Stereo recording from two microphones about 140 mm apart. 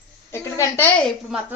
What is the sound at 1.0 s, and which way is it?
Speech, 5° right (ahead or behind).